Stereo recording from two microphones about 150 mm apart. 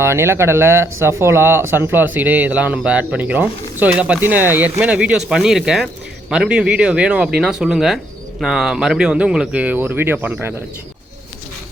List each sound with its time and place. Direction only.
0.0 s speech: 15° right (ahead or behind)